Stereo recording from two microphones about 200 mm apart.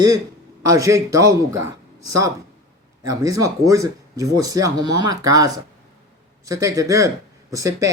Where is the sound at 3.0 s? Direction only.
15° right (ahead or behind).